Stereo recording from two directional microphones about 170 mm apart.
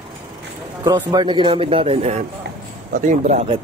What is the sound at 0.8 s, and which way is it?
Speech, 20° right (ahead or behind).